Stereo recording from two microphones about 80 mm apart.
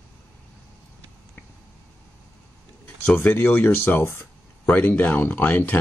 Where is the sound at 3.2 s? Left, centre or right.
Left.